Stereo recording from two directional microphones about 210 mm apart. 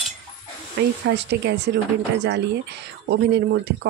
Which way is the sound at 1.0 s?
55° right (ahead or behind).